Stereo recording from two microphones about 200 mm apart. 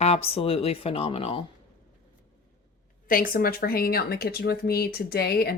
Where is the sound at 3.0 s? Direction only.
45° left (ahead or behind).